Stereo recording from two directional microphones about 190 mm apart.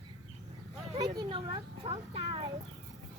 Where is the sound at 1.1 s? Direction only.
30° right (ahead or behind).